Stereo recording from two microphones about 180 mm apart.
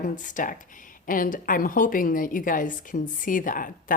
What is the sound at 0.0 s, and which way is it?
A woman's voice, 45° left (ahead or behind).